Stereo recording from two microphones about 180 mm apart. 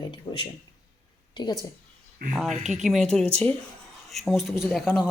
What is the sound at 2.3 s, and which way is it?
Speech, centre (ahead or behind).